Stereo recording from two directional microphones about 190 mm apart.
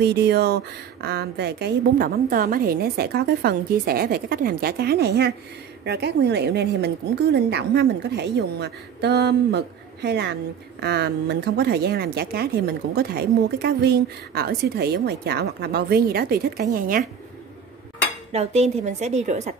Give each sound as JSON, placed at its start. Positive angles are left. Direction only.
{"t": 0.0, "sound": "speech", "side_deg": -60}
{"t": 18.3, "sound": "a woman's voice", "side_deg": -35}